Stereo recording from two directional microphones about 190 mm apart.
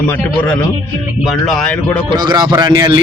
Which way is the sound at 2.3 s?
20° right (ahead or behind).